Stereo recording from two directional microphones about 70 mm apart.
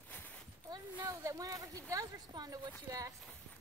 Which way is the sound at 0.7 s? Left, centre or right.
Right.